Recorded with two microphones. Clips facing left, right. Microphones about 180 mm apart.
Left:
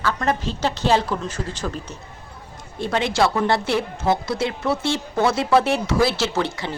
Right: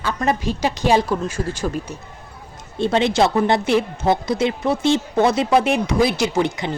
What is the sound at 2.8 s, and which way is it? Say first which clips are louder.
Speech: right 4 dB; 25° right (ahead or behind).